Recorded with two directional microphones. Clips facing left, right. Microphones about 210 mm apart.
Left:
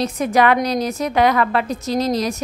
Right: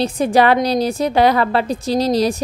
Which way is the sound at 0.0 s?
30° right (ahead or behind).